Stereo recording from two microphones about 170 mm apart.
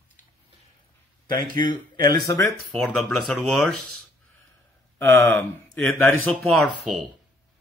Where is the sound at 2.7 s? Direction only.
5° left (ahead or behind).